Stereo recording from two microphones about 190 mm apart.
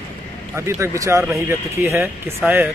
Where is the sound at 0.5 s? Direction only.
15° right (ahead or behind).